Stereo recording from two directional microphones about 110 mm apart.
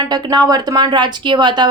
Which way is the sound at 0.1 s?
40° right (ahead or behind).